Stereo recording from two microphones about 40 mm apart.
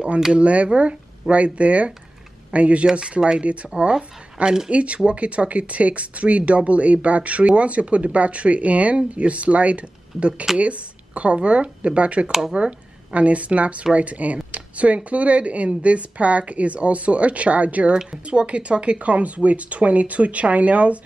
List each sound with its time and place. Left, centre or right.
0.3 s speech: right
2.9 s speech: right
12.3 s speech: centre
12.5 s speech: right